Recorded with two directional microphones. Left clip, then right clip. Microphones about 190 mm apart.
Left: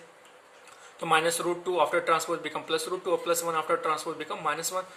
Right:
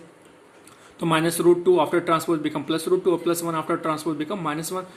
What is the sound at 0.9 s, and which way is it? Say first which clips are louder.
Speech: right 2 dB; 15° right (ahead or behind).